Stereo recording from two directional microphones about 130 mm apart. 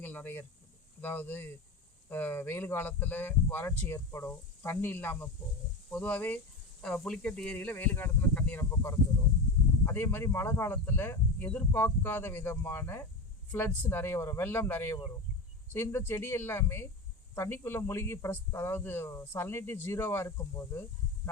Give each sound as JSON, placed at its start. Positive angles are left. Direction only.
{"t": 0.0, "sound": "speech", "side_deg": 15}
{"t": 9.8, "sound": "speech", "side_deg": 15}